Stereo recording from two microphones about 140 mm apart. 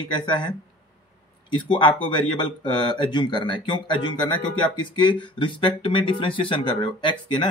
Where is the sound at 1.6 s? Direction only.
35° left (ahead or behind).